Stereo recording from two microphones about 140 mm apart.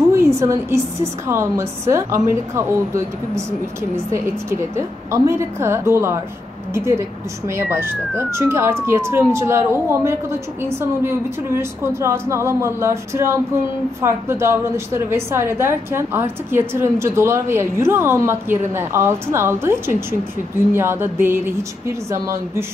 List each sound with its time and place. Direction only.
0.1 s a woman's voice: 20° right (ahead or behind)